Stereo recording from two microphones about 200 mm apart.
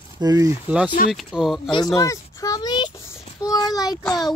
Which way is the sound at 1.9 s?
15° left (ahead or behind).